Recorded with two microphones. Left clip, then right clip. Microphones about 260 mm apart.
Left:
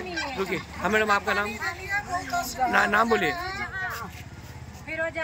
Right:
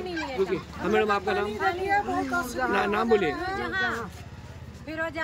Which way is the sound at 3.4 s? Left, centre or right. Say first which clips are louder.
Right 2 dB; right.